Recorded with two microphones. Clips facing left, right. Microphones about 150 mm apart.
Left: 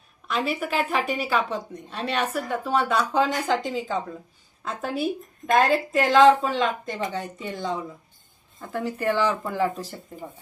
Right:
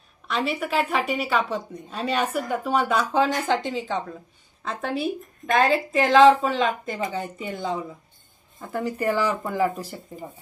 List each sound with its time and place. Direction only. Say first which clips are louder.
0.3 s a woman's voice: even; centre (ahead or behind)